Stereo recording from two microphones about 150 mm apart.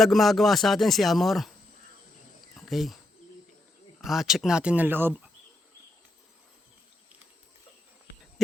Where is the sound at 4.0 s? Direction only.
Centre (ahead or behind).